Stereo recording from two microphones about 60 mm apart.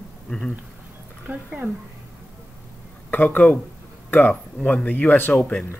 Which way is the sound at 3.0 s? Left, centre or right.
Left.